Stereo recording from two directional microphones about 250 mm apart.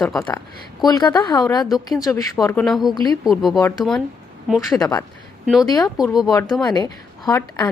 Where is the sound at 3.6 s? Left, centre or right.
Centre.